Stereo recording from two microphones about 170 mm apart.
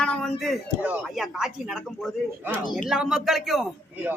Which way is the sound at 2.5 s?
5° right (ahead or behind).